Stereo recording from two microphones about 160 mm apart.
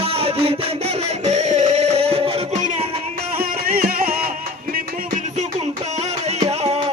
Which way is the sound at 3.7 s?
60° right (ahead or behind).